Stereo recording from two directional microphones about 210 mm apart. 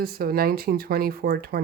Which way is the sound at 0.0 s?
45° right (ahead or behind).